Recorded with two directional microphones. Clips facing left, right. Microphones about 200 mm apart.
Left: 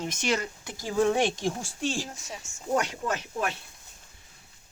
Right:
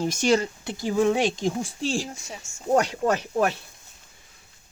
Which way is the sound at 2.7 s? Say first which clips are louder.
Right 6 dB; 40° right (ahead or behind).